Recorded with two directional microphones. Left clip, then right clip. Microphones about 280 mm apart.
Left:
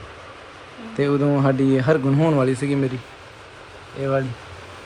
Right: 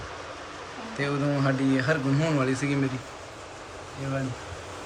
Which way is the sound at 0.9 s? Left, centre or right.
Centre.